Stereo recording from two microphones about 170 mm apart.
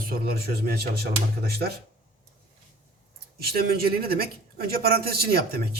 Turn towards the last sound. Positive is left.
turn(degrees=-65)  # may be behind; listen again after turning